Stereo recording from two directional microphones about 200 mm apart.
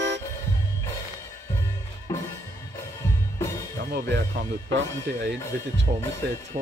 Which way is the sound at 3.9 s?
60° right (ahead or behind).